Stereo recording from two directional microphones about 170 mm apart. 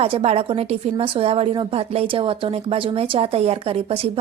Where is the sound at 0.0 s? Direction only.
35° right (ahead or behind).